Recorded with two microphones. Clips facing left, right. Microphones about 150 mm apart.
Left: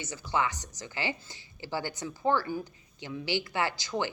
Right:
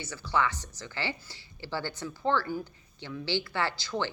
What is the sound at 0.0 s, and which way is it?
Speech, 20° left (ahead or behind).